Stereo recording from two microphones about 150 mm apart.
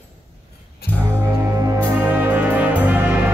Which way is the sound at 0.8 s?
90° left.